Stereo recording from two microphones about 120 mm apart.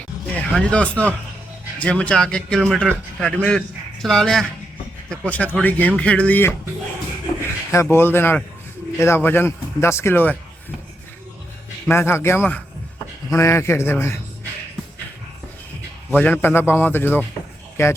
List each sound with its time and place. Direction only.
0.3 s a man's voice: 10° left (ahead or behind)
7.7 s speech: 20° left (ahead or behind)
11.9 s speech: 20° left (ahead or behind)
13.3 s speech: 25° left (ahead or behind)
16.1 s a man's voice: 15° left (ahead or behind)